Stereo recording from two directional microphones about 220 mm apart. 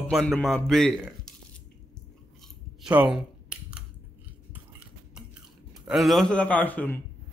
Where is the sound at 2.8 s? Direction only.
5° right (ahead or behind).